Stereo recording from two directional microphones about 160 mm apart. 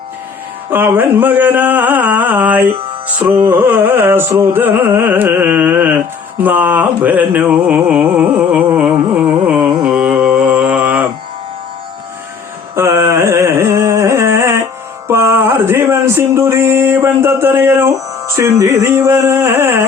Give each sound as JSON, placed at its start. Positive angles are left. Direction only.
{"t": 0.7, "sound": "a sound", "side_deg": -10}
{"t": 3.4, "sound": "music", "side_deg": -10}
{"t": 12.7, "sound": "carnatic music", "side_deg": -20}
{"t": 15.0, "sound": "music", "side_deg": -15}